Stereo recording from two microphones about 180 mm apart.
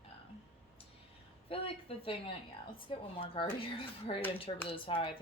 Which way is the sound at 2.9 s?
30° left (ahead or behind).